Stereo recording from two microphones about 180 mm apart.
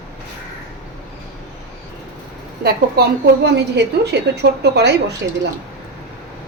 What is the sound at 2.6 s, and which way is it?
A woman's voice, 65° right (ahead or behind).